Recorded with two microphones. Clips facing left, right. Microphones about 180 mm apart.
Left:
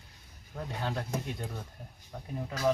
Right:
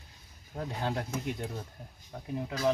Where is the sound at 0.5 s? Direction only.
15° right (ahead or behind).